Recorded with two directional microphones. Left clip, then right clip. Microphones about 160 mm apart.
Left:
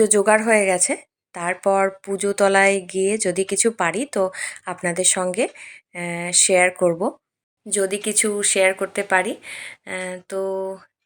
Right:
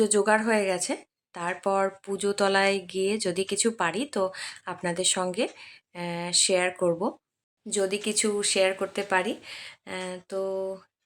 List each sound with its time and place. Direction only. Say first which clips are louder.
0.0 s a woman's voice: left 6 dB; 20° left (ahead or behind)